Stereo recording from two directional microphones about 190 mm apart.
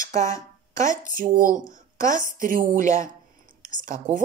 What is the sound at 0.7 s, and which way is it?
A woman's voice, 45° right (ahead or behind).